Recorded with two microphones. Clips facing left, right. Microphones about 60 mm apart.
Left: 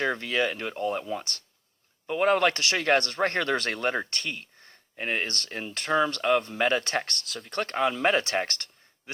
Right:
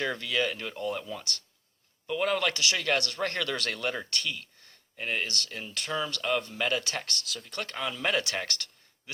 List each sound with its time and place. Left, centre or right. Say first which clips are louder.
0.0 s speech: left 3 dB; left